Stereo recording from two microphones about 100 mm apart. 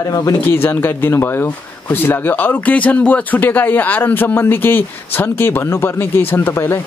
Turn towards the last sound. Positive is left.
turn(degrees=20)  # may be behind; listen again after turning